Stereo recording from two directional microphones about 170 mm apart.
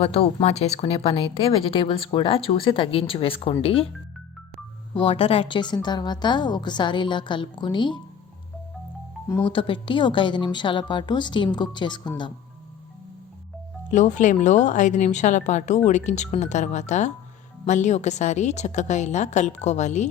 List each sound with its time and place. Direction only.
0.0 s speech: 35° left (ahead or behind)
4.9 s a woman's voice: 30° left (ahead or behind)
9.5 s a woman's voice: 30° left (ahead or behind)
13.9 s a woman's voice: 45° left (ahead or behind)